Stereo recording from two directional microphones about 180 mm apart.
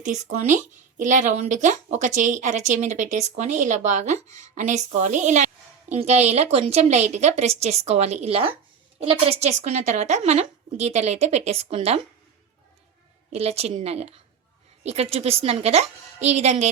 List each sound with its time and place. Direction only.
0.0 s speech: 40° right (ahead or behind)
13.3 s speech: 35° right (ahead or behind)